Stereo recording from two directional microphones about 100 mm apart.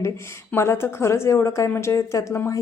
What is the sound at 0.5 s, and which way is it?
A woman's voice, 25° left (ahead or behind).